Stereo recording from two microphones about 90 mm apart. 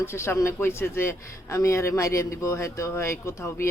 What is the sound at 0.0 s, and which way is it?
A man's voice, 25° left (ahead or behind).